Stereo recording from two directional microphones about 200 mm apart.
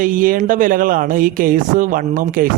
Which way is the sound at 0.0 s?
40° right (ahead or behind).